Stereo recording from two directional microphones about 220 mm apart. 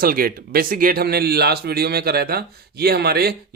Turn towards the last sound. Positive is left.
turn(degrees=-45)  # may be behind; listen again after turning